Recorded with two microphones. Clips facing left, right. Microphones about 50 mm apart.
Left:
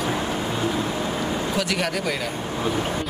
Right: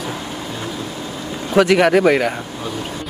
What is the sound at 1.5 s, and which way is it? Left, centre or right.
Speech, right.